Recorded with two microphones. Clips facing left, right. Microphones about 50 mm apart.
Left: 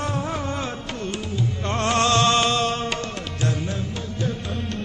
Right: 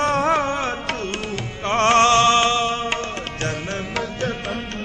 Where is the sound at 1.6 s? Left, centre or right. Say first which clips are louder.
Right 7 dB; right.